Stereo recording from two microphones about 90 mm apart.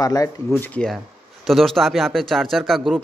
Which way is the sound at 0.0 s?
45° left (ahead or behind).